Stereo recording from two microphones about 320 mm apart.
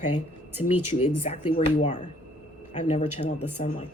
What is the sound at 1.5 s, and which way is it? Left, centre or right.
Speech, left.